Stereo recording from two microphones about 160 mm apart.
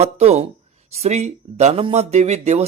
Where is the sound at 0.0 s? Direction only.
40° right (ahead or behind).